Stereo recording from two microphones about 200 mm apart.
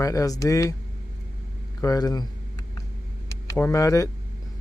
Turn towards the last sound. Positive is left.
turn(degrees=15)  # may be behind; listen again after turning